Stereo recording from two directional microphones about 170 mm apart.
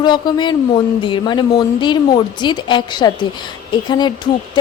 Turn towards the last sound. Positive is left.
turn(degrees=25)  # may be behind; listen again after turning